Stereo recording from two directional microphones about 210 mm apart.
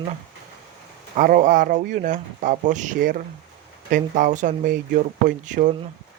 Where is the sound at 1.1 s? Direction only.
40° right (ahead or behind).